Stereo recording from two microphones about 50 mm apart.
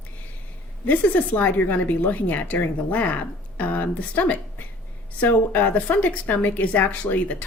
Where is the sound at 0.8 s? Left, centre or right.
Left.